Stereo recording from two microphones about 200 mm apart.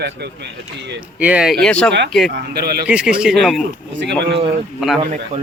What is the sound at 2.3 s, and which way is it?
Speech, 55° right (ahead or behind).